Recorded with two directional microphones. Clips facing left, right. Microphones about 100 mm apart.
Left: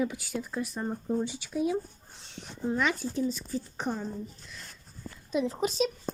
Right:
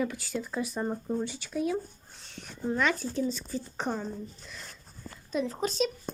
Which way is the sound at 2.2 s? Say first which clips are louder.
Left 1 dB; 20° left (ahead or behind).